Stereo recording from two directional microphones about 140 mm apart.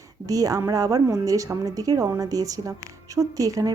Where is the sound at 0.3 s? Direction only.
25° right (ahead or behind).